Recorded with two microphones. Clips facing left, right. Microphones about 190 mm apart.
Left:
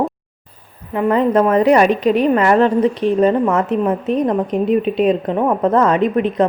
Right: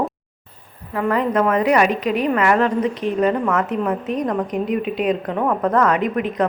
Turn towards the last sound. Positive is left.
turn(degrees=25)  # may be behind; listen again after turning